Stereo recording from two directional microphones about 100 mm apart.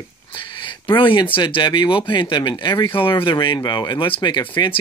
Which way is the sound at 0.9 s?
55° left (ahead or behind).